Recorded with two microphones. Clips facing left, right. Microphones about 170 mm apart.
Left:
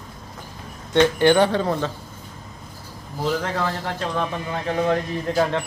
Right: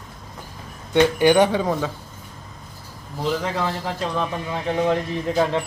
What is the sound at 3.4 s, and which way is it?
A man's voice, 5° right (ahead or behind).